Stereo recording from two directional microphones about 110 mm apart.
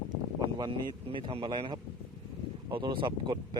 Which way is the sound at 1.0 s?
55° right (ahead or behind).